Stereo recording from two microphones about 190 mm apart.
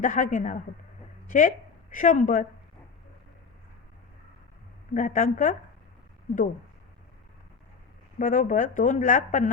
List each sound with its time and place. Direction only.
0.0 s a woman's voice: 40° left (ahead or behind)
4.9 s speech: 45° left (ahead or behind)
8.2 s speech: 45° left (ahead or behind)